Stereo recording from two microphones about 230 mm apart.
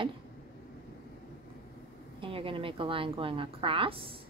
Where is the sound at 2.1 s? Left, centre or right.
Right.